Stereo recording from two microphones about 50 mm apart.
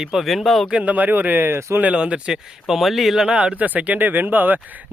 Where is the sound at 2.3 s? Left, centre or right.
Centre.